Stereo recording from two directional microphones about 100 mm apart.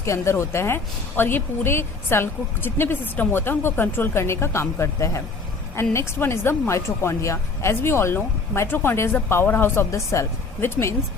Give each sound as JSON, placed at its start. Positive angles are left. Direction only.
{"t": 0.0, "sound": "a woman's voice", "side_deg": 30}